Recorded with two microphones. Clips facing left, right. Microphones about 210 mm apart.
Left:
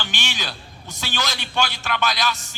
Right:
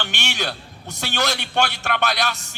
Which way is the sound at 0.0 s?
60° right (ahead or behind).